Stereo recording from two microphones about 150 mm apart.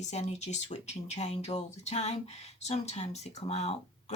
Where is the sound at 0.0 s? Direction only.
50° left (ahead or behind).